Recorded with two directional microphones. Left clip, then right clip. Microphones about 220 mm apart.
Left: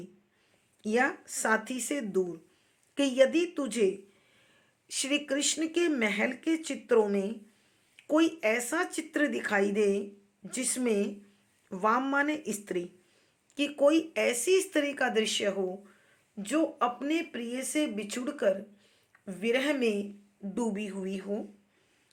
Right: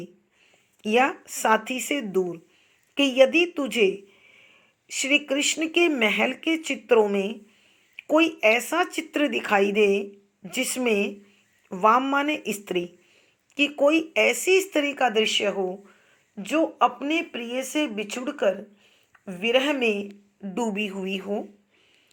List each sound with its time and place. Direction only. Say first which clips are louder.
0.8 s speech: right 7 dB; centre (ahead or behind)
4.9 s speech: right 8 dB; centre (ahead or behind)